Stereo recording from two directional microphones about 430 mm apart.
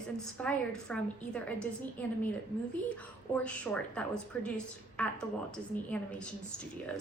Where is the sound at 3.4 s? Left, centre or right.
Centre.